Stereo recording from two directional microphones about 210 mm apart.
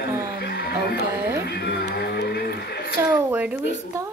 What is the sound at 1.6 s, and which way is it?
Music, 50° left (ahead or behind).